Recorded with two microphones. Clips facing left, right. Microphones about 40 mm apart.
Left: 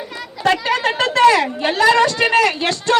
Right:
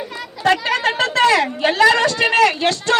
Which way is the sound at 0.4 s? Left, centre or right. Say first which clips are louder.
Even; right.